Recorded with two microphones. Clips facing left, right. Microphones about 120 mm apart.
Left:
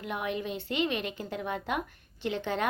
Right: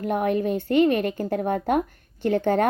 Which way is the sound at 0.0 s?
45° right (ahead or behind).